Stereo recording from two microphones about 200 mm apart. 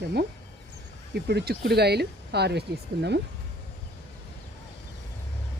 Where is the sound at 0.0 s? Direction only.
55° right (ahead or behind).